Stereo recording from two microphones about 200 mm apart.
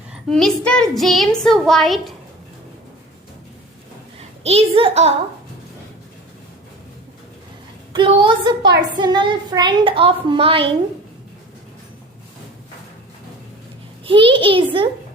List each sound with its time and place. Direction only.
0.1 s a woman's voice: centre (ahead or behind)
4.4 s a child's voice: 30° right (ahead or behind)
7.9 s a woman's voice: 25° right (ahead or behind)
14.0 s a woman's voice: 25° right (ahead or behind)